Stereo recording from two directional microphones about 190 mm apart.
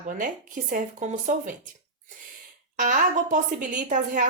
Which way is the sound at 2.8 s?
45° right (ahead or behind).